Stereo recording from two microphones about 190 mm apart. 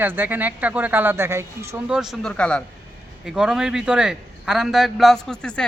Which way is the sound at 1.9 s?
Centre (ahead or behind).